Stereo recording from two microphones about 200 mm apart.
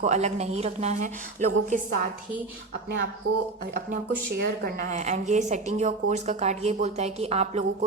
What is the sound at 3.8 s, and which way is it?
A woman's voice, 45° right (ahead or behind).